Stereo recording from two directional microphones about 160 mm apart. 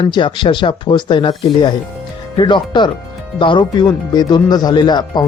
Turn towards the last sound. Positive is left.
turn(degrees=25)  # may be behind; listen again after turning